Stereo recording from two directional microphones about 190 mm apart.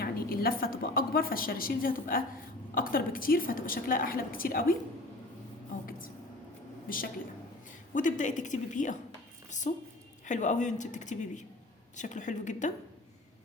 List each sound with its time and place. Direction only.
0.0 s a woman's voice: 50° left (ahead or behind)
6.8 s a woman's voice: 50° left (ahead or behind)